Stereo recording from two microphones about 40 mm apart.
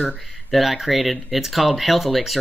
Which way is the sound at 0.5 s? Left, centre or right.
Centre.